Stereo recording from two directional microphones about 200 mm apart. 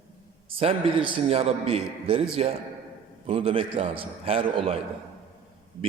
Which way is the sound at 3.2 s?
25° right (ahead or behind).